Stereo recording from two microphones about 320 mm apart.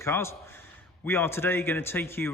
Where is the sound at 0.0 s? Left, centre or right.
Centre.